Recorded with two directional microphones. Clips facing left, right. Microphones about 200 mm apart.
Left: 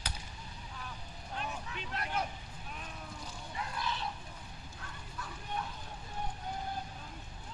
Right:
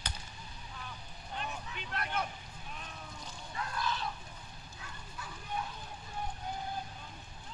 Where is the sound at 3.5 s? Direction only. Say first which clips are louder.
Right 2 dB; 25° left (ahead or behind).